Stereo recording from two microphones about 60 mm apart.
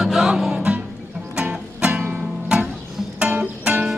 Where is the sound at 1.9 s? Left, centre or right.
Centre.